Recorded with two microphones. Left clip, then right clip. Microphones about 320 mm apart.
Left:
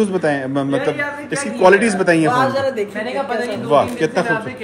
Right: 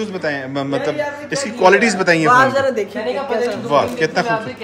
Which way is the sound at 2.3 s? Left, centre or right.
Right.